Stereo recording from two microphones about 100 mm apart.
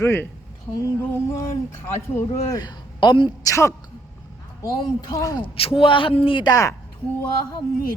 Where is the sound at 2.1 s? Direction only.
30° left (ahead or behind).